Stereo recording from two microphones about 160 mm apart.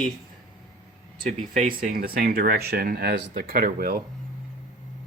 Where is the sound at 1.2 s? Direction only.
50° right (ahead or behind).